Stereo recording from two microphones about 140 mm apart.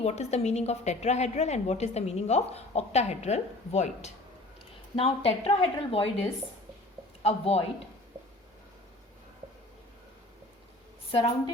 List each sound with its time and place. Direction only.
0.0 s a woman's voice: 50° left (ahead or behind)
4.9 s a woman's voice: 45° left (ahead or behind)
7.2 s speech: 50° left (ahead or behind)
11.1 s a woman's voice: 40° left (ahead or behind)